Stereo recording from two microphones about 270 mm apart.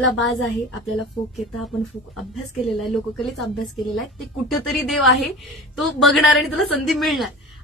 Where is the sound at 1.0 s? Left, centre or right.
Centre.